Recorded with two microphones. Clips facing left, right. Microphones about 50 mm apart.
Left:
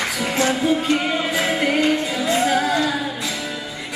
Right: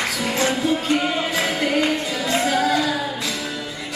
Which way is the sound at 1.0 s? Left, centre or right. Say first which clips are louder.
Left 1 dB; centre.